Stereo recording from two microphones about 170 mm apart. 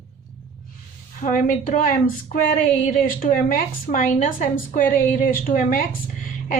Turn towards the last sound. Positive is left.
turn(degrees=55)  # may be behind; listen again after turning